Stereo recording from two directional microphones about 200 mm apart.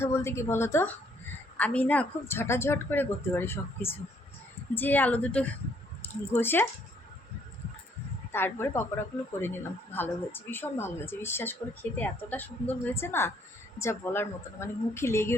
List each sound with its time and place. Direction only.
0.0 s speech: 15° left (ahead or behind)
8.3 s speech: 10° left (ahead or behind)
9.9 s speech: 10° left (ahead or behind)